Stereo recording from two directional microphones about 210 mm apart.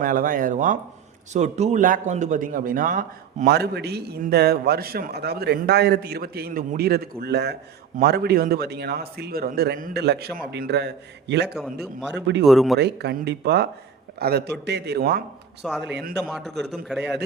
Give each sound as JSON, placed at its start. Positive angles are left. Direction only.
{"t": 0.0, "sound": "speech", "side_deg": -40}
{"t": 11.5, "sound": "a man's voice", "side_deg": 0}
{"t": 12.8, "sound": "speech", "side_deg": -50}
{"t": 16.2, "sound": "a man's voice", "side_deg": 0}